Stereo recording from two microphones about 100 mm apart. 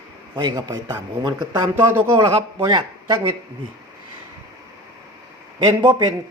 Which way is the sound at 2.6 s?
45° right (ahead or behind).